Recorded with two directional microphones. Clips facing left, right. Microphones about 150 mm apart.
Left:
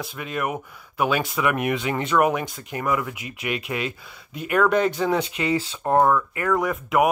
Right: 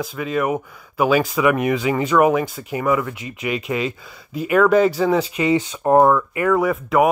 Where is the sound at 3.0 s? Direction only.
10° left (ahead or behind).